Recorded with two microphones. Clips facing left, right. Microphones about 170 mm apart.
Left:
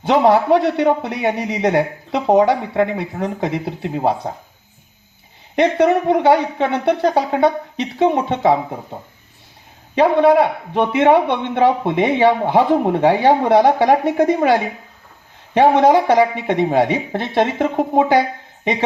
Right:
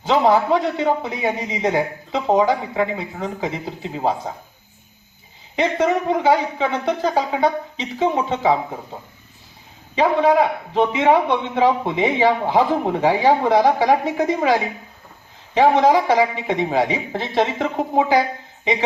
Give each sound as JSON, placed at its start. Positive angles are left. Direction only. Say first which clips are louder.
{"t": 0.0, "sound": "a man's voice", "louder": "left 3 dB", "side_deg": 65}
{"t": 5.5, "sound": "a man's voice", "louder": "left 5 dB", "side_deg": 65}
{"t": 9.9, "sound": "a man's voice", "louder": "left 4 dB", "side_deg": 60}